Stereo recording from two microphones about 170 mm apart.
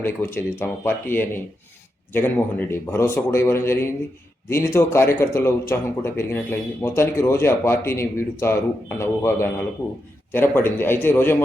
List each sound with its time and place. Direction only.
0.0 s speech: 15° left (ahead or behind)